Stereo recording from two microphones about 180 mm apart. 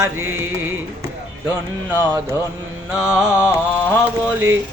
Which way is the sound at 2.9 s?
5° right (ahead or behind).